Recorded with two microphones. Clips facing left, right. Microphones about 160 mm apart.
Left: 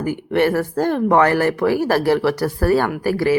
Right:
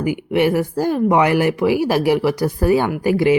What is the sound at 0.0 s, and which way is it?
Speech, 10° right (ahead or behind).